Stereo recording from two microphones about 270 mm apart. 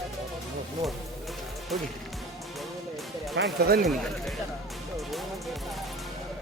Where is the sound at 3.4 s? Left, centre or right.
Right.